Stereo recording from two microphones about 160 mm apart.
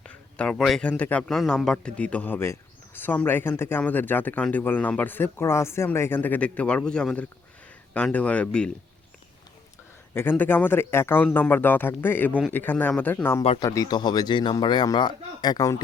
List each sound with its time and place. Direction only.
0.0 s a man's voice: 5° left (ahead or behind)
10.2 s a man's voice: 10° left (ahead or behind)